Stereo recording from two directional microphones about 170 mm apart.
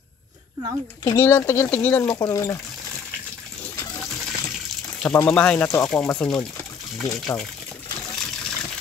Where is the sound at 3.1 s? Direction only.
5° left (ahead or behind).